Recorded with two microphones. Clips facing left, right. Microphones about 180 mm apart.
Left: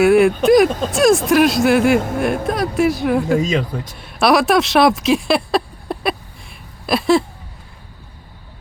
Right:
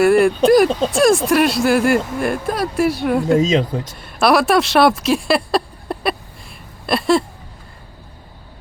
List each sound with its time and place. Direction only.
0.0 s speech: centre (ahead or behind)
3.4 s speech: 20° right (ahead or behind)
3.8 s speech: centre (ahead or behind)